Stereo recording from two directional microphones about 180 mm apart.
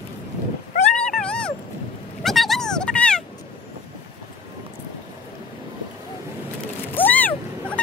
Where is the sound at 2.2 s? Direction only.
Centre (ahead or behind).